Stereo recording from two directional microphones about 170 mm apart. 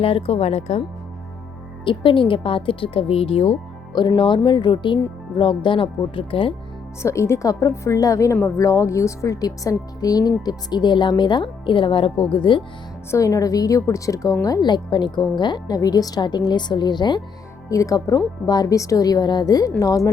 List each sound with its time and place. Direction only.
0.0 s speech: 35° left (ahead or behind)
1.8 s a woman's voice: 30° left (ahead or behind)
7.0 s a woman's voice: 15° left (ahead or behind)
13.1 s a woman's voice: 20° left (ahead or behind)